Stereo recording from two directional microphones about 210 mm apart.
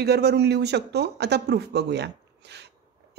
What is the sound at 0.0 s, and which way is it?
A woman's voice, 50° right (ahead or behind).